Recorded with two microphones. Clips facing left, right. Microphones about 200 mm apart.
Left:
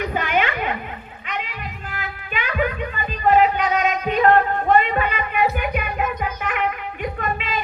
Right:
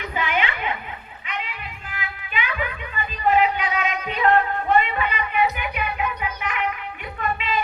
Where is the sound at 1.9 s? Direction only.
45° left (ahead or behind).